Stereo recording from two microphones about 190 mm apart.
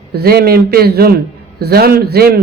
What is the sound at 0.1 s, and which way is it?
A man's voice, 55° right (ahead or behind).